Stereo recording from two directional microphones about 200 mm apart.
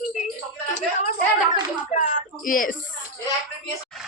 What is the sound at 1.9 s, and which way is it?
Speech, 40° left (ahead or behind).